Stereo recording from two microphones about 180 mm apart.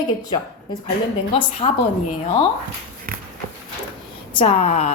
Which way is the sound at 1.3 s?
30° left (ahead or behind).